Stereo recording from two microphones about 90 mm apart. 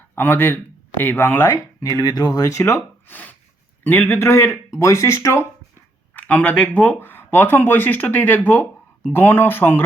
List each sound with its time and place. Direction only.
0.2 s speech: 25° left (ahead or behind)
1.8 s speech: 45° left (ahead or behind)
6.1 s speech: 15° left (ahead or behind)